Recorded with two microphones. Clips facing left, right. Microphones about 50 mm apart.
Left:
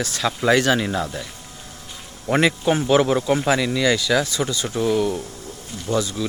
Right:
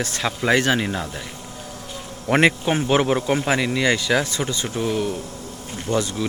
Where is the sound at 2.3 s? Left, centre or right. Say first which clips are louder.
Right 2 dB; right.